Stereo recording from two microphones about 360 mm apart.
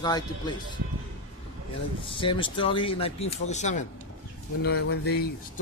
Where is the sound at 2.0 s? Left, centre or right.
Centre.